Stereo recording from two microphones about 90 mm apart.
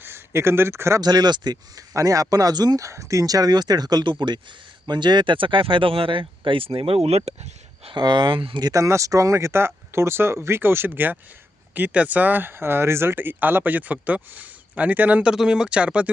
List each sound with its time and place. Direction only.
0.0 s speech: 25° right (ahead or behind)
1.0 s speech: 50° right (ahead or behind)
1.9 s speech: 35° right (ahead or behind)
2.8 s speech: 35° right (ahead or behind); by 7.3 s 90° right
7.9 s speech: 55° right (ahead or behind); by 8.6 s 75° right (ahead or behind)
8.7 s speech: 35° right (ahead or behind); by 16.0 s 15° right (ahead or behind)